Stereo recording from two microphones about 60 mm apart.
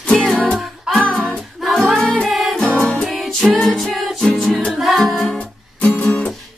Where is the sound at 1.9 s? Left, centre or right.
Centre.